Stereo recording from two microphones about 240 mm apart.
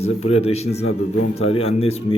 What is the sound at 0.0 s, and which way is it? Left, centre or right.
A man's voice, left.